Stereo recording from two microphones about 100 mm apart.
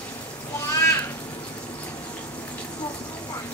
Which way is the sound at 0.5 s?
30° left (ahead or behind).